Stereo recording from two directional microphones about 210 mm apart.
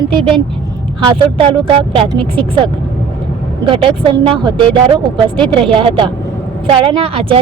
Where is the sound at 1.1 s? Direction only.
25° right (ahead or behind).